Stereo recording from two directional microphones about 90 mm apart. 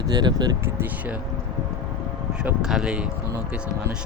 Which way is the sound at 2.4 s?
10° right (ahead or behind).